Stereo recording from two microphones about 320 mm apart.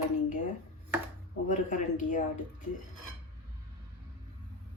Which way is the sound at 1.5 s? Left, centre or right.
Left.